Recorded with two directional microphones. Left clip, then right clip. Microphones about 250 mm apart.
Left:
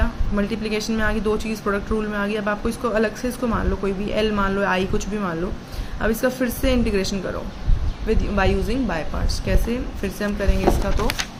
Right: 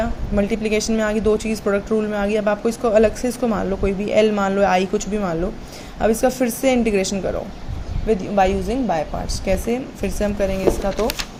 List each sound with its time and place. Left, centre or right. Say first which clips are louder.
0.0 s a woman's voice: right 4 dB; centre